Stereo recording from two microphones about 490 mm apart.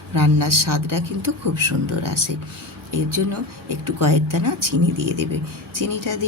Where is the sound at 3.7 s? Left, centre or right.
Right.